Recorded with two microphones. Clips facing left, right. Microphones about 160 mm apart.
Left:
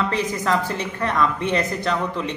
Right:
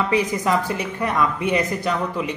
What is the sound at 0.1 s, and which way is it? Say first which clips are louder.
Speech: right 2 dB; 15° right (ahead or behind).